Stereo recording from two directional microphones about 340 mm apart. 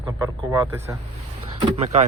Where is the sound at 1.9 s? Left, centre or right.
Centre.